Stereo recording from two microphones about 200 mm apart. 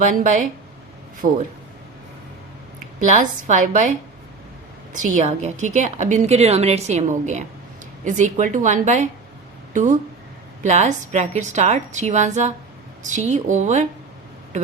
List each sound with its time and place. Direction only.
0.0 s a woman's voice: 40° right (ahead or behind)
3.0 s a woman's voice: 40° right (ahead or behind)
4.9 s a woman's voice: 40° right (ahead or behind)